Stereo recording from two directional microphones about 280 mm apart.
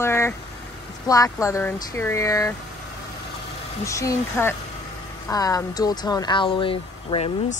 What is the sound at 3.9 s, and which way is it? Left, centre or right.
Speech, centre.